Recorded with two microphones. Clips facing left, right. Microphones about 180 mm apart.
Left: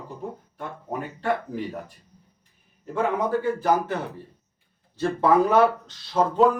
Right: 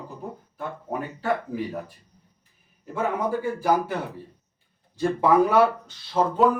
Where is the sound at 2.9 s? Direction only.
10° right (ahead or behind).